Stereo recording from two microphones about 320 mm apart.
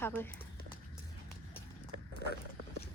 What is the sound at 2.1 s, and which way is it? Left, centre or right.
Wild animals, left.